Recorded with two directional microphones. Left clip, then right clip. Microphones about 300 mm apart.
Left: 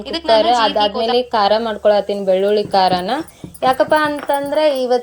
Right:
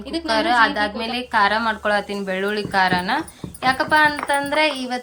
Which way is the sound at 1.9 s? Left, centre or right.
Centre.